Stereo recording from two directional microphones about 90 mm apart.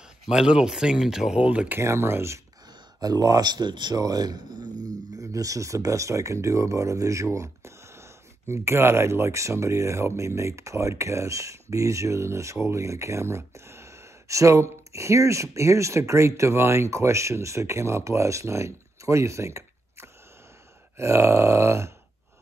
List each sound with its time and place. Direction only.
0.3 s speech: 10° right (ahead or behind)
1.8 s speech: 30° right (ahead or behind)
3.0 s speech: 45° right (ahead or behind)